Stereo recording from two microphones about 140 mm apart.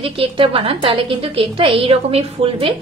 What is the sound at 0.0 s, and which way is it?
A woman's voice, 40° right (ahead or behind).